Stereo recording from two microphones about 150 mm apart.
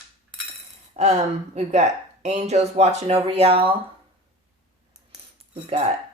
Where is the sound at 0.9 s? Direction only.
50° right (ahead or behind).